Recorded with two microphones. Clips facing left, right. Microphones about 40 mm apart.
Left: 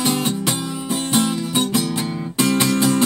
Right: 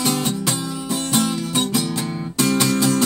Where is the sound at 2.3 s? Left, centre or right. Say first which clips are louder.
Left 1 dB; left.